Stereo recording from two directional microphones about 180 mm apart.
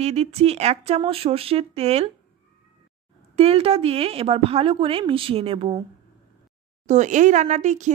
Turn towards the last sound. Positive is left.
turn(degrees=-40)  # may be behind; listen again after turning